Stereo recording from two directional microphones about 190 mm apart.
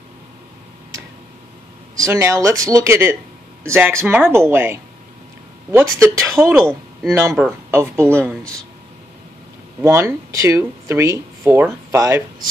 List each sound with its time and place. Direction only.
2.0 s speech: 15° right (ahead or behind)
9.8 s speech: 15° right (ahead or behind)